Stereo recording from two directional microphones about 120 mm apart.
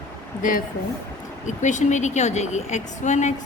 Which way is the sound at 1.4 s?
90° left.